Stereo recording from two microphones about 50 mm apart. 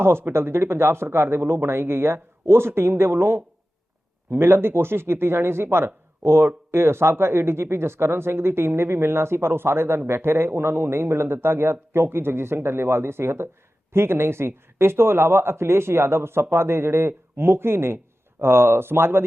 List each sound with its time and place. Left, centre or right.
0.0 s speech: right